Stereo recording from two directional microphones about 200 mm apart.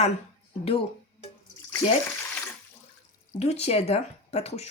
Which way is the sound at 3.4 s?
30° left (ahead or behind).